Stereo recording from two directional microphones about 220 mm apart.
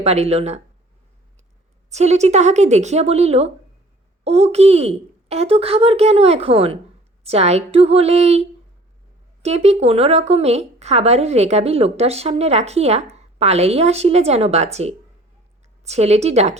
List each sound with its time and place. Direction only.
0.0 s a woman's voice: 30° right (ahead or behind)
1.9 s a woman's voice: 30° right (ahead or behind)